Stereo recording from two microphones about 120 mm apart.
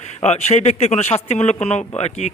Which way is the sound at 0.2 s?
65° left (ahead or behind).